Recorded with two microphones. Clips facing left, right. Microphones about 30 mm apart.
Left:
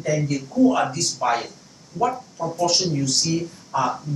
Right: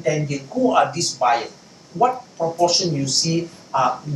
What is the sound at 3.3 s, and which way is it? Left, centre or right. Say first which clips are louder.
Speech: right 3 dB; right.